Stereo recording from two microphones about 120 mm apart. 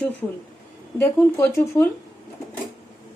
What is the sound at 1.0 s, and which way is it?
Speech, 20° left (ahead or behind).